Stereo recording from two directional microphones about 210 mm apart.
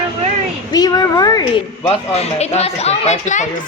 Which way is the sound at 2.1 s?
30° left (ahead or behind).